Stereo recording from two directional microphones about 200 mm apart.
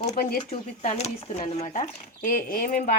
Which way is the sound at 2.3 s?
45° left (ahead or behind).